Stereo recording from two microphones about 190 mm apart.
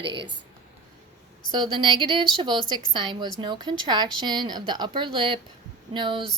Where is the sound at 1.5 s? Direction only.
25° right (ahead or behind).